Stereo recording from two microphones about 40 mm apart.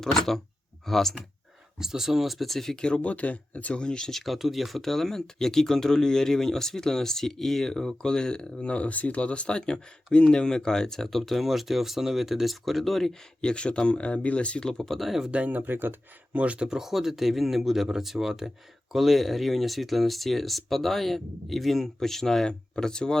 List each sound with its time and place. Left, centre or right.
0.0 s speech: centre
1.8 s speech: centre
2.8 s speech: left
4.1 s speech: centre
13.4 s speech: left
14.6 s speech: centre
14.8 s speech: centre
15.3 s speech: right
15.5 s speech: right
16.3 s speech: right
16.6 s speech: centre